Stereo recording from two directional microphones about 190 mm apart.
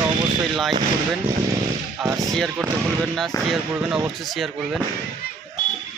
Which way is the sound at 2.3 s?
Centre (ahead or behind).